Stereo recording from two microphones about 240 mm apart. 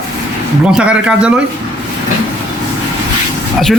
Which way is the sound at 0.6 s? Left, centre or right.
Centre.